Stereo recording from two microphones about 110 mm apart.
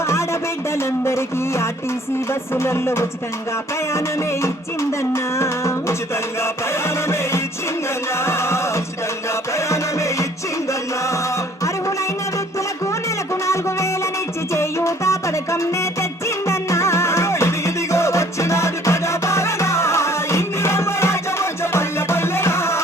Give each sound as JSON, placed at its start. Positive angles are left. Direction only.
{"t": 0.0, "sound": "a sound", "side_deg": 25}
{"t": 0.8, "sound": "music", "side_deg": 25}
{"t": 4.4, "sound": "music", "side_deg": 25}
{"t": 13.5, "sound": "music", "side_deg": 25}